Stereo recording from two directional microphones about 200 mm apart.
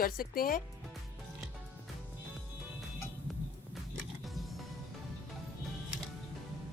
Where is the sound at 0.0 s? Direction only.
45° left (ahead or behind).